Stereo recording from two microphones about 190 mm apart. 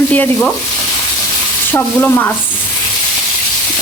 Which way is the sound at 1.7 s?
10° left (ahead or behind).